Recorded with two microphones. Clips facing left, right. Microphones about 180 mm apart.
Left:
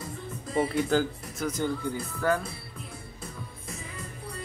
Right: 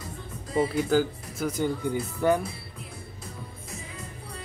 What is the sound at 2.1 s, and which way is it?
Music, 20° right (ahead or behind).